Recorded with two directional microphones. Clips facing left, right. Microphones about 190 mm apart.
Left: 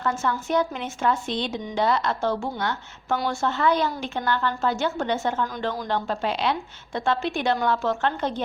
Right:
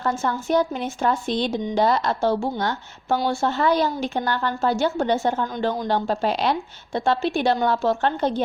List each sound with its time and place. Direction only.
0.0 s a woman's voice: 35° right (ahead or behind)